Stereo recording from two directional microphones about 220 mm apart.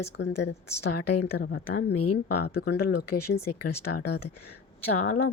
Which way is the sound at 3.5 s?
90° left.